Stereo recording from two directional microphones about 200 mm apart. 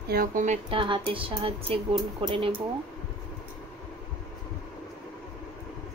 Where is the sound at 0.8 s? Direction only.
25° right (ahead or behind).